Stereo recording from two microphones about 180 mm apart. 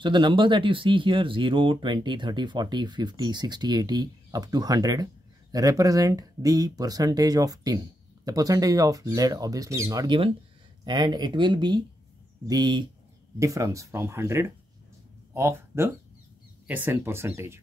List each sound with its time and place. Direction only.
0.0 s speech: 25° right (ahead or behind)